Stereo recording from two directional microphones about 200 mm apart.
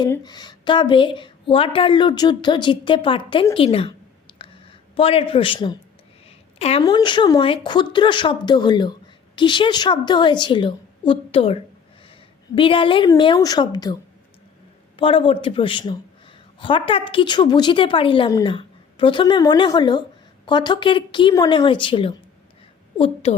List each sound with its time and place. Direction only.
0.0 s speech: 20° left (ahead or behind)
4.3 s a sound: 25° left (ahead or behind)
4.9 s a woman's voice: 25° left (ahead or behind)
14.9 s speech: 25° left (ahead or behind)